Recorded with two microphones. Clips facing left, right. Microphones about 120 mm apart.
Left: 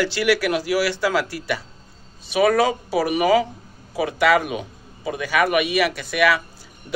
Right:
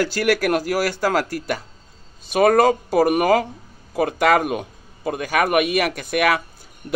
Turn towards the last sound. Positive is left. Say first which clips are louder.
# even
turn(degrees=-50)  # may be behind; listen again after turning